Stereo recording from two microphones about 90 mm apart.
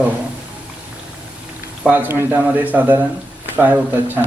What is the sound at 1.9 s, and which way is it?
A woman's voice, 20° right (ahead or behind).